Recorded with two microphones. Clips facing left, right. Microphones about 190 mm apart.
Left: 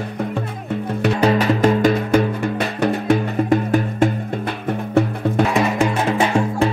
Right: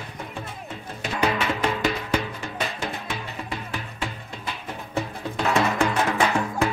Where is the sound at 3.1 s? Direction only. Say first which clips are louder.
Left 16 dB; 45° left (ahead or behind).